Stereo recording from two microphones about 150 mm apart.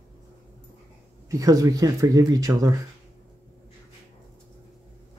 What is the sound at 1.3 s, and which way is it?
Speech, 25° right (ahead or behind).